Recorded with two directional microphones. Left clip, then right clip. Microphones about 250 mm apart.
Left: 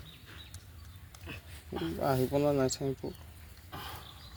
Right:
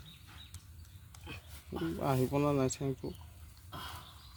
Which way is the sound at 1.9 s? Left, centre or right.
Centre.